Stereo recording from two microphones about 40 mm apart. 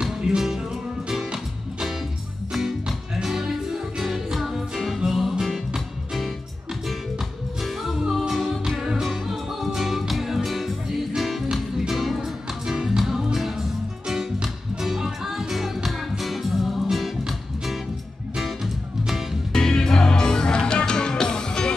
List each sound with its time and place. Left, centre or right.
0.3 s music: centre
4.0 s music: centre
8.1 s music: centre
12.2 s music: centre
18.3 s music: centre
19.5 s music: centre